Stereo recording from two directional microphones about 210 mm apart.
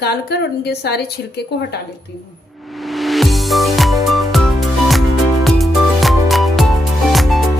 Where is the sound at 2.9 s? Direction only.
Centre (ahead or behind).